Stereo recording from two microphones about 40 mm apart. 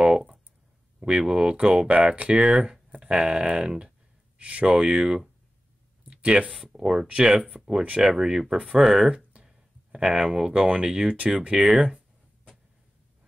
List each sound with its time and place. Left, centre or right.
0.0 s a sound: right
0.9 s speech: right
2.9 s a sound: right
3.5 s speech: right
4.4 s speech: right
4.6 s speech: centre
6.0 s a sound: right
6.7 s speech: centre
11.1 s speech: right
11.5 s speech: centre